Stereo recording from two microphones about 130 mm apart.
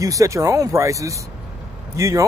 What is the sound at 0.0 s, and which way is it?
Speech, 25° right (ahead or behind).